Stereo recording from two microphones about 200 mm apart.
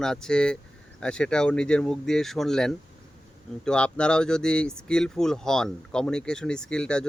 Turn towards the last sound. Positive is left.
turn(degrees=5)  # may be behind; listen again after turning